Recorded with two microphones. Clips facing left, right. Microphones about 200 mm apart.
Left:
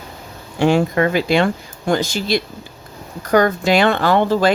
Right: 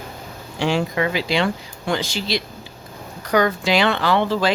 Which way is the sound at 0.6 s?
50° left (ahead or behind).